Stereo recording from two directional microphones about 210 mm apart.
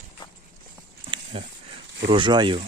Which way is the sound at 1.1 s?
30° right (ahead or behind).